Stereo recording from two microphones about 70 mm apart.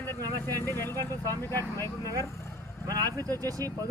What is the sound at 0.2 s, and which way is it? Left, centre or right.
Speech, right.